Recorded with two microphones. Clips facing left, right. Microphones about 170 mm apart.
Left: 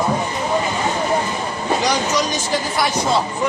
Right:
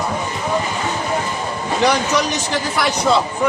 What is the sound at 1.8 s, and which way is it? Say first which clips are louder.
Speech: right 5 dB; 60° right (ahead or behind).